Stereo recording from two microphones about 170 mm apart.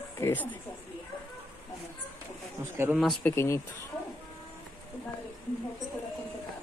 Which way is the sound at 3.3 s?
15° left (ahead or behind).